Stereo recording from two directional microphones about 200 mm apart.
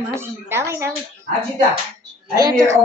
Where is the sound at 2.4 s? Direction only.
20° right (ahead or behind).